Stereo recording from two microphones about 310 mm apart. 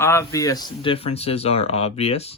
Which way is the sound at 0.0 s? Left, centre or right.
Centre.